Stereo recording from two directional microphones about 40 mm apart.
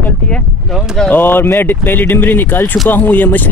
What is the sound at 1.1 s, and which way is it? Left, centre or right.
Speech, left.